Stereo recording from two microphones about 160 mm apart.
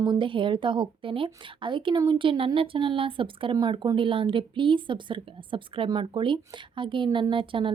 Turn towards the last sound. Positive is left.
turn(degrees=-35)  # may be behind; listen again after turning